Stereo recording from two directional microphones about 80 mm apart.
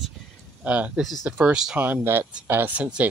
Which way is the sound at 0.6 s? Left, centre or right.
Centre.